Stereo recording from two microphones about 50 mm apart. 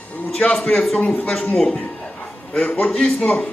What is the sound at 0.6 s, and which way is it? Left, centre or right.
A man's voice, left.